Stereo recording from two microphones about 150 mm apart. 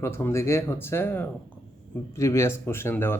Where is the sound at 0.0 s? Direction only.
15° left (ahead or behind).